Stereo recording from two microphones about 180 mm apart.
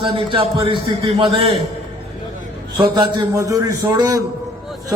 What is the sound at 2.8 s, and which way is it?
A man's voice, 20° right (ahead or behind).